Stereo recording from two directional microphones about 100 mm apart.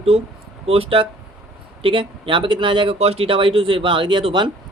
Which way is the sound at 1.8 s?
55° right (ahead or behind).